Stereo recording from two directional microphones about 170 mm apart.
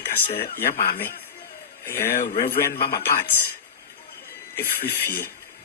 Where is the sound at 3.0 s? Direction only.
15° left (ahead or behind).